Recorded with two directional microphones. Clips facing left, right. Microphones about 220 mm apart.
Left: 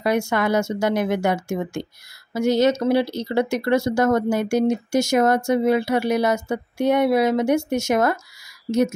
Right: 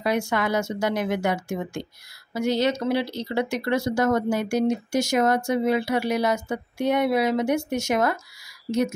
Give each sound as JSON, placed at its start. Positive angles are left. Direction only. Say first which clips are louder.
{"t": 0.0, "sound": "speech", "louder": "left 3 dB", "side_deg": 45}